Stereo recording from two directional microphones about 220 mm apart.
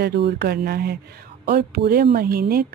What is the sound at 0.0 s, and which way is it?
Speech, 50° right (ahead or behind).